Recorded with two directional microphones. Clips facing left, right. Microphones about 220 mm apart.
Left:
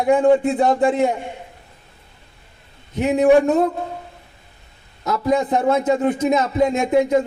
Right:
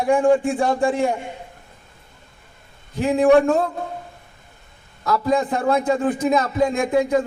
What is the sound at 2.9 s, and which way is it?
Speech, 20° left (ahead or behind).